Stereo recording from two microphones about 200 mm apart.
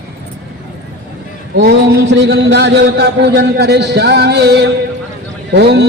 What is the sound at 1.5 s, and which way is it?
Speech, 55° right (ahead or behind).